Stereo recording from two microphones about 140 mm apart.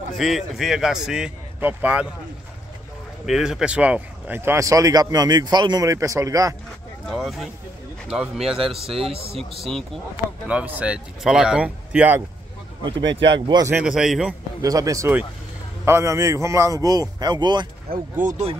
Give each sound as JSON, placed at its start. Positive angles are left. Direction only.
{"t": 0.2, "sound": "speech", "side_deg": 0}
{"t": 3.3, "sound": "speech", "side_deg": -5}
{"t": 7.1, "sound": "speech", "side_deg": 0}
{"t": 8.9, "sound": "a man's voice", "side_deg": -45}
{"t": 9.4, "sound": "speech", "side_deg": 0}
{"t": 10.5, "sound": "speech", "side_deg": -10}
{"t": 12.8, "sound": "speech", "side_deg": -35}
{"t": 13.7, "sound": "speech", "side_deg": -5}
{"t": 14.6, "sound": "speech", "side_deg": -25}
{"t": 17.9, "sound": "speech", "side_deg": -90}